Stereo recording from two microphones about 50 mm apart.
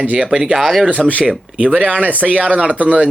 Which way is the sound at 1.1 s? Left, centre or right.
Right.